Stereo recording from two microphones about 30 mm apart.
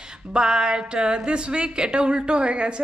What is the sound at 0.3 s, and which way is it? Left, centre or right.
A woman's voice, right.